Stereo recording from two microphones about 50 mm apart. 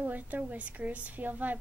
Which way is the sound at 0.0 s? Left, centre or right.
Right.